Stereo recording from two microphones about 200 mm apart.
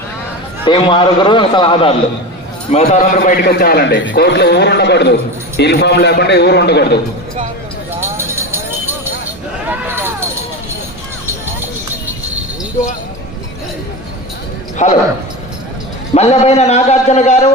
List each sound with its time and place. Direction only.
0.6 s a man's voice: 25° left (ahead or behind)
2.7 s a man's voice: 35° left (ahead or behind); by 7.0 s 55° left (ahead or behind)
8.0 s music: 10° right (ahead or behind)
9.6 s a sound: 10° right (ahead or behind)
14.8 s a man's voice: 35° left (ahead or behind)
16.1 s a man's voice: 30° left (ahead or behind)